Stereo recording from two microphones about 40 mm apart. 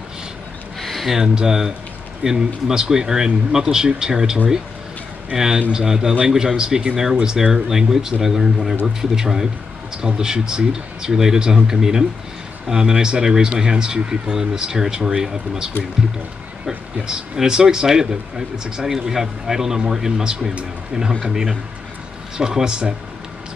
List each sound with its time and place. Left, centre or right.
0.7 s a sound: centre
1.2 s speech: centre
7.5 s speech: centre